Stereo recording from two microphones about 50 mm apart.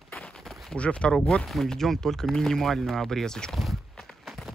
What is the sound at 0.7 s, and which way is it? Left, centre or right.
Speech, left.